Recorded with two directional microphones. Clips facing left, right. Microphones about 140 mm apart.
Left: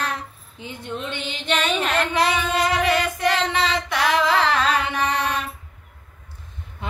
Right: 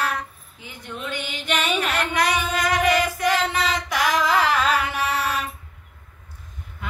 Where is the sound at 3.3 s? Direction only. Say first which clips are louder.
Left 1 dB; 5° right (ahead or behind).